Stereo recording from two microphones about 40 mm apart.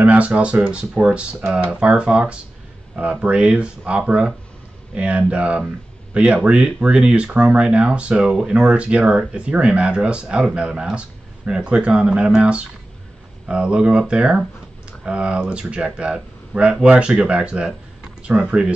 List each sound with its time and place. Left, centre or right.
0.0 s speech: right
8.2 s speech: centre